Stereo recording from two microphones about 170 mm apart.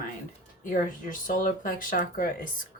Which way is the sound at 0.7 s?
50° left (ahead or behind).